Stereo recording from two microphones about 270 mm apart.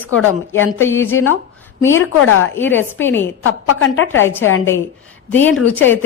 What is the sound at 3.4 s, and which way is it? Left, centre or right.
Speech, left.